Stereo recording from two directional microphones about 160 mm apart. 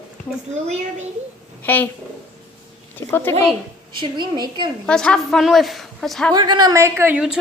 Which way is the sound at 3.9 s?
30° right (ahead or behind).